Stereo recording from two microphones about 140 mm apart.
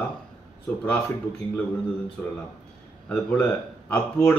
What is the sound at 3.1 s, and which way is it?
Speech, 10° left (ahead or behind).